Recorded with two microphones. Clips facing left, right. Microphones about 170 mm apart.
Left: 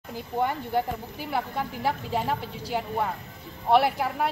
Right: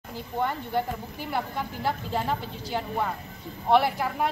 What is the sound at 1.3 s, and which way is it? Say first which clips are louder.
A woman's voice: left 1 dB; 5° left (ahead or behind).